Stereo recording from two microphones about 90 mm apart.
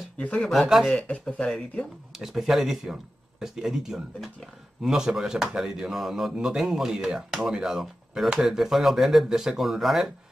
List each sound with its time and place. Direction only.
0.2 s speech: 15° left (ahead or behind)
0.5 s speech: centre (ahead or behind)
0.9 s speech: 15° left (ahead or behind)
2.1 s speech: 5° right (ahead or behind)